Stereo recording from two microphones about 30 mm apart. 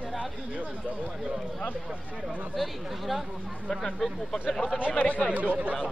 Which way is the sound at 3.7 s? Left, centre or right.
Centre.